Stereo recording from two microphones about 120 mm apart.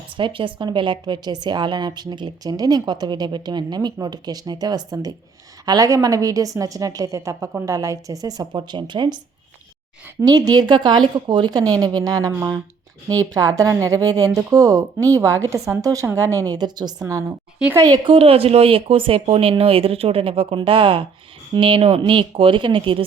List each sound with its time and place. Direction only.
0.2 s a woman's voice: 45° right (ahead or behind)